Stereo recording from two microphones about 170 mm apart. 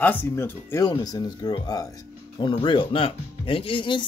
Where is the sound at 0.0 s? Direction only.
10° left (ahead or behind).